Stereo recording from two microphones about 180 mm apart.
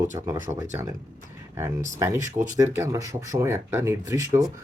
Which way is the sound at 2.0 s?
15° right (ahead or behind).